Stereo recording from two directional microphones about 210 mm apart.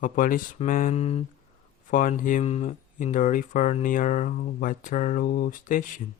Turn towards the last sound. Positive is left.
turn(degrees=40)  # may be behind; listen again after turning